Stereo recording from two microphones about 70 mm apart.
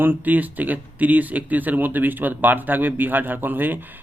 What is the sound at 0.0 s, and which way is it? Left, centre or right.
Speech, right.